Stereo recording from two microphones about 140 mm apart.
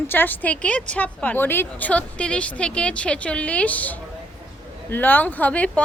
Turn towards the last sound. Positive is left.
turn(degrees=10)  # may be behind; listen again after turning